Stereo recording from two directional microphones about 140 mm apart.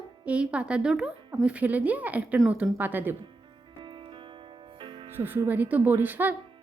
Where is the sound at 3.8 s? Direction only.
35° right (ahead or behind).